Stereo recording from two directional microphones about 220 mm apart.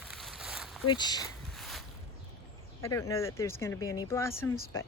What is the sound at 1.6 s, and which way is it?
Boat, centre (ahead or behind).